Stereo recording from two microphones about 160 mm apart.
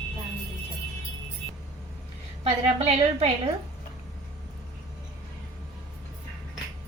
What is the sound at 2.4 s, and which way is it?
A woman's voice, 40° right (ahead or behind).